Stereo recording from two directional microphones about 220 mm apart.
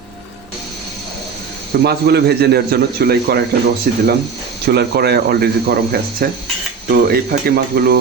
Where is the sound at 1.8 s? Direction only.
45° right (ahead or behind).